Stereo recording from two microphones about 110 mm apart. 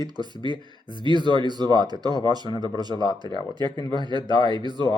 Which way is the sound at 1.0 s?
45° right (ahead or behind).